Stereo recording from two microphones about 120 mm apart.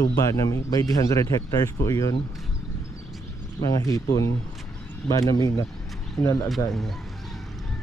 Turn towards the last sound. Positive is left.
turn(degrees=0)  # may be behind; listen again after turning